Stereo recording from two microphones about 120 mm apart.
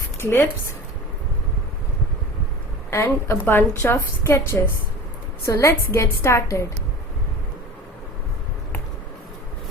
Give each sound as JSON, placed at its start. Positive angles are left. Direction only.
{"t": 0.2, "sound": "speech", "side_deg": 20}
{"t": 2.9, "sound": "a woman's voice", "side_deg": 20}